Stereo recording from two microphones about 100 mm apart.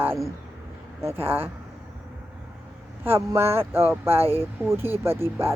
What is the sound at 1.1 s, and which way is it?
Speech, 75° right (ahead or behind).